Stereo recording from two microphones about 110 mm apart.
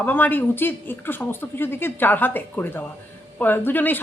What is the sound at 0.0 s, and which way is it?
A woman's voice, 15° left (ahead or behind).